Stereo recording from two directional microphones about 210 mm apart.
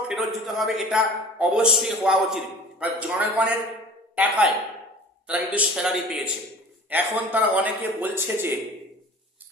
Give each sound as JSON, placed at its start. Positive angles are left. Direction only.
{"t": 0.1, "sound": "a man's voice", "side_deg": 0}